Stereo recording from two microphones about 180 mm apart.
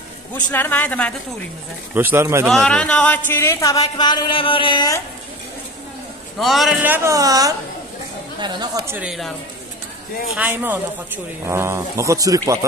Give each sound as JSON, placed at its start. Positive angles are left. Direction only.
{"t": 0.3, "sound": "speech", "side_deg": 10}
{"t": 2.0, "sound": "speech", "side_deg": -15}
{"t": 2.4, "sound": "speech", "side_deg": 0}
{"t": 6.4, "sound": "speech", "side_deg": 0}
{"t": 10.3, "sound": "speech", "side_deg": -10}